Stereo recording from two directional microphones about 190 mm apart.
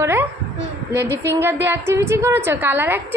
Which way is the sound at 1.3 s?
10° right (ahead or behind).